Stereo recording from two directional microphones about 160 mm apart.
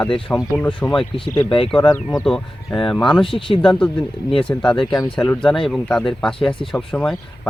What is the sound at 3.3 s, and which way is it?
Speech, 35° left (ahead or behind).